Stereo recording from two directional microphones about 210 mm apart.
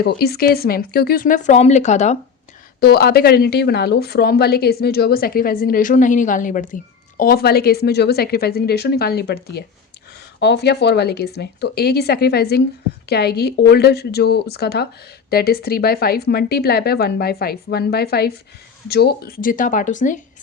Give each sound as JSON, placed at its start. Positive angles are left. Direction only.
{"t": 0.0, "sound": "speech", "side_deg": 50}
{"t": 2.8, "sound": "speech", "side_deg": 50}